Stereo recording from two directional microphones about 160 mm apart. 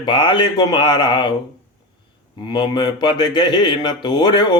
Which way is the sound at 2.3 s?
30° left (ahead or behind).